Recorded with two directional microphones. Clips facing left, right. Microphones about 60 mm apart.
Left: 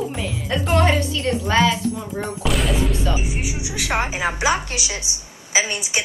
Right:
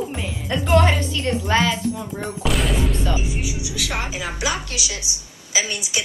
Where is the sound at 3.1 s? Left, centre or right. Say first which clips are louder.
Even; left.